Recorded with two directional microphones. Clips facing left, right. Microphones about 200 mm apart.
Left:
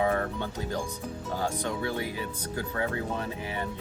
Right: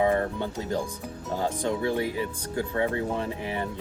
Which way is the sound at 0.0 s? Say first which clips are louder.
Right 3 dB; 25° right (ahead or behind).